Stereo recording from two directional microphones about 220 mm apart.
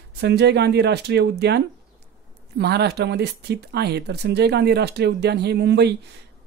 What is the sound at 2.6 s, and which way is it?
Speech, 50° right (ahead or behind).